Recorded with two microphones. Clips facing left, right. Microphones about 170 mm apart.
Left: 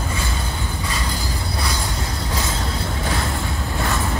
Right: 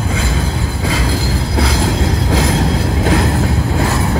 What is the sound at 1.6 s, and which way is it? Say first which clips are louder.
Vehicle: right 12 dB; 90° right.